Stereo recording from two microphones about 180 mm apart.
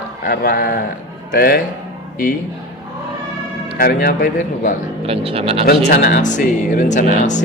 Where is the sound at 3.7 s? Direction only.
55° left (ahead or behind).